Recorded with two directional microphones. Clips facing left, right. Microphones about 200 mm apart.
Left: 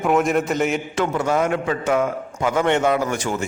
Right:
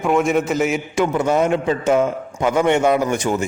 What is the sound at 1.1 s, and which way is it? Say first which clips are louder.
A man's voice: right 3 dB; 20° right (ahead or behind).